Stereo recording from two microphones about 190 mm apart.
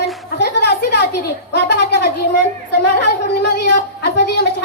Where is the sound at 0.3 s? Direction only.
60° left (ahead or behind).